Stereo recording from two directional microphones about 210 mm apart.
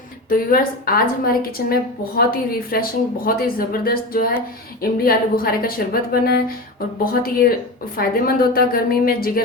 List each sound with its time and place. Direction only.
0.3 s a woman's voice: 45° left (ahead or behind)